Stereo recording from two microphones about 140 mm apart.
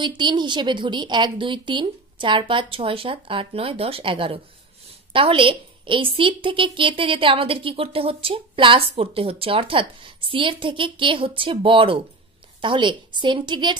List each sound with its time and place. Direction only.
0.2 s a woman's voice: 35° right (ahead or behind)